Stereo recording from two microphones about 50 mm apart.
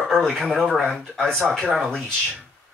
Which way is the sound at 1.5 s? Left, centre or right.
Centre.